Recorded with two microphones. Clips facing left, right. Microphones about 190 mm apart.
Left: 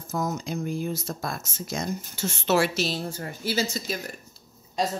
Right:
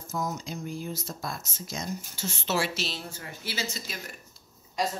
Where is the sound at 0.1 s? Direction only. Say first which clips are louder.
Left 4 dB; 60° left (ahead or behind); by 4.0 s 40° left (ahead or behind).